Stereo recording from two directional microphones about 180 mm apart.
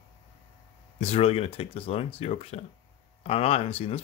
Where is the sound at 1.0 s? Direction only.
35° left (ahead or behind).